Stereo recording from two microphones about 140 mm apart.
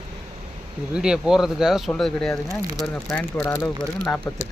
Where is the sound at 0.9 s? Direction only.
5° right (ahead or behind).